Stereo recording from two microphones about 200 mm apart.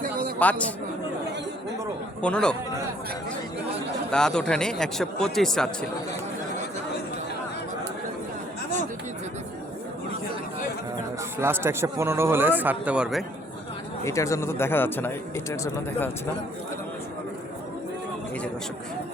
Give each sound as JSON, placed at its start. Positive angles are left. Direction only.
{"t": 0.0, "sound": "a sound", "side_deg": -45}
{"t": 0.3, "sound": "speech", "side_deg": 5}
{"t": 2.2, "sound": "a man's voice", "side_deg": 5}
{"t": 4.1, "sound": "a man's voice", "side_deg": 5}
{"t": 11.3, "sound": "speech", "side_deg": -10}
{"t": 14.0, "sound": "speech", "side_deg": 15}